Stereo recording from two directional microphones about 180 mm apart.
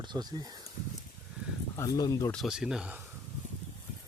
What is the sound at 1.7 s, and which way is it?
Speech, 20° left (ahead or behind).